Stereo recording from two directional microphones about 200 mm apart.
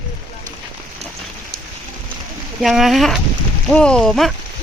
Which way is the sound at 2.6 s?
Centre (ahead or behind).